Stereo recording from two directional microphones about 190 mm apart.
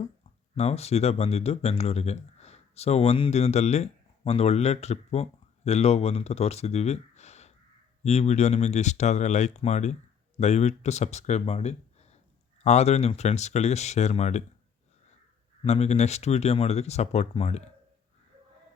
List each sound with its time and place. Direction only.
0.5 s speech: 35° left (ahead or behind)
15.6 s speech: 35° left (ahead or behind)